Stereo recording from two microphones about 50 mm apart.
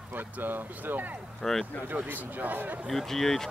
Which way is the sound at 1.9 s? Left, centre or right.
Right.